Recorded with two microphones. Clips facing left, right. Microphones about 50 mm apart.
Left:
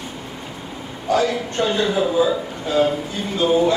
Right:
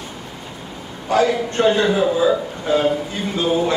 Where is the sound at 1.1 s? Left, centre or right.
Right.